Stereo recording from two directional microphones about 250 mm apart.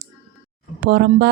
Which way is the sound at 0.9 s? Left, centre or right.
Right.